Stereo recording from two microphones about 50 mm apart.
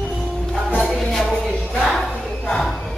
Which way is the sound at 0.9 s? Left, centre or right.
Centre.